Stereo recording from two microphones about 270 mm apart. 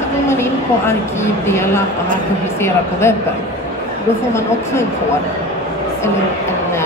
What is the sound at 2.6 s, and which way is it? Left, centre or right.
Speech, centre.